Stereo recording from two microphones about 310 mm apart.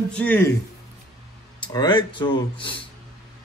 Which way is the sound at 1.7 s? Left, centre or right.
Centre.